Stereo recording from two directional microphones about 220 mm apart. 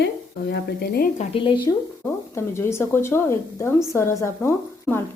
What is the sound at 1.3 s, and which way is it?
Speech, 20° left (ahead or behind).